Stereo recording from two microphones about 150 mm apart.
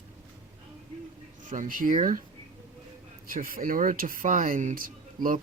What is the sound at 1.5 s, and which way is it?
Speech, 60° right (ahead or behind).